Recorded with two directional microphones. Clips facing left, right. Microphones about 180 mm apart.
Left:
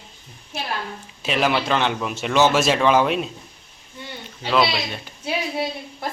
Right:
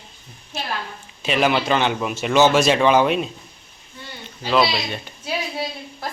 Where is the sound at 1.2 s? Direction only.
Centre (ahead or behind).